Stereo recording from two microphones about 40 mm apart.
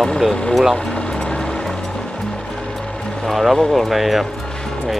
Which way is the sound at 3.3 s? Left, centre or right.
Centre.